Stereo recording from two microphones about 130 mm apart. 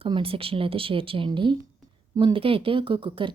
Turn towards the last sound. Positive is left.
turn(degrees=-40)  # may be behind; listen again after turning